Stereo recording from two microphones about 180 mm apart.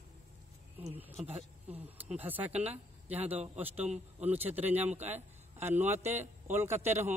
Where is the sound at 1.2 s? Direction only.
35° right (ahead or behind).